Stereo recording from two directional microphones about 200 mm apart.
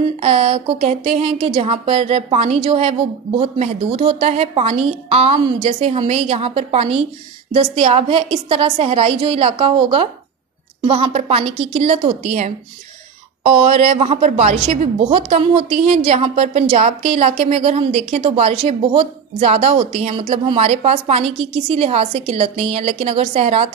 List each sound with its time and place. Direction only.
0.2 s a woman's voice: 30° right (ahead or behind)